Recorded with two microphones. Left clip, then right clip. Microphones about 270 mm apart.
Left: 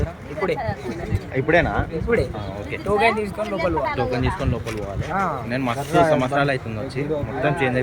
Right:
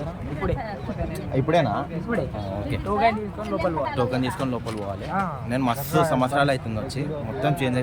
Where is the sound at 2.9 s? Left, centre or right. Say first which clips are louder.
Left 3 dB; left.